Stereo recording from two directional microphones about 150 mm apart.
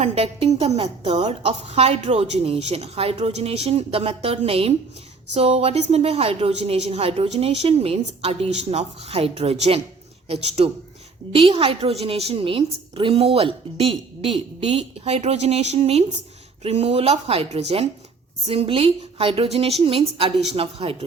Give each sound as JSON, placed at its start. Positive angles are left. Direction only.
{"t": 0.0, "sound": "a woman's voice", "side_deg": -40}